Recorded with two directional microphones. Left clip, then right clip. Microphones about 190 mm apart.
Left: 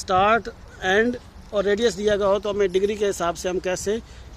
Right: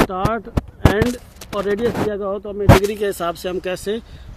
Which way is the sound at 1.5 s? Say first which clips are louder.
Right 1 dB; 25° right (ahead or behind).